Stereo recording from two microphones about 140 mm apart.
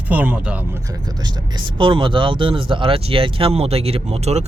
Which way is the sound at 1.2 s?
35° right (ahead or behind).